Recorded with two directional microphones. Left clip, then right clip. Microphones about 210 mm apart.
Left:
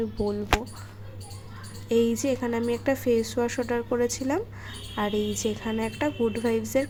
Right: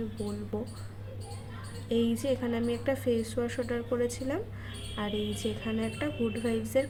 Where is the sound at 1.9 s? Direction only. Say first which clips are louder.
Left 5 dB; 25° left (ahead or behind).